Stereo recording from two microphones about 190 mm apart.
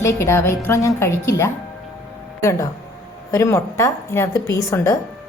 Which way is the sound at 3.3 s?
15° left (ahead or behind).